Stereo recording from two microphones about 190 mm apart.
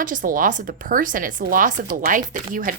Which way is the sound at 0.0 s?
45° right (ahead or behind).